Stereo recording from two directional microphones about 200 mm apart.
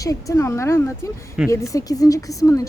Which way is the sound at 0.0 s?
15° left (ahead or behind).